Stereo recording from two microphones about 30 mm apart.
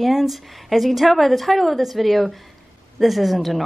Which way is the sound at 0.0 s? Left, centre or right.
Centre.